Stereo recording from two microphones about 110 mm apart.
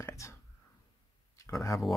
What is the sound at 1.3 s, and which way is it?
Speech, 30° left (ahead or behind).